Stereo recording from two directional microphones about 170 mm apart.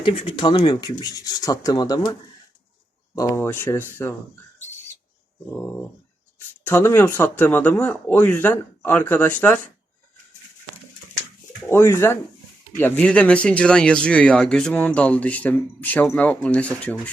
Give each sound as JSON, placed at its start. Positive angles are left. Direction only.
{"t": 0.0, "sound": "speech", "side_deg": 30}
{"t": 3.2, "sound": "speech", "side_deg": 15}
{"t": 6.7, "sound": "speech", "side_deg": 15}
{"t": 11.7, "sound": "speech", "side_deg": 15}